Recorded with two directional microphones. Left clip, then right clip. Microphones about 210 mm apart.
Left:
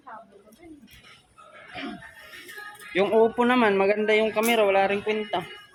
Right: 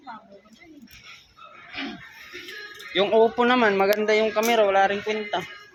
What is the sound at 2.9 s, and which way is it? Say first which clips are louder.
Speech: right 2 dB; 15° left (ahead or behind).